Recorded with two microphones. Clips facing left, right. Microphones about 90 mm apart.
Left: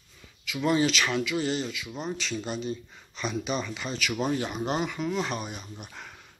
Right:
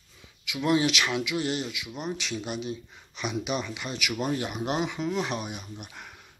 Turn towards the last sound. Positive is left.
turn(degrees=-10)  # may be behind; listen again after turning